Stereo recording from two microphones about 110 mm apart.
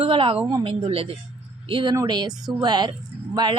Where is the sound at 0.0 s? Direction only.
50° right (ahead or behind).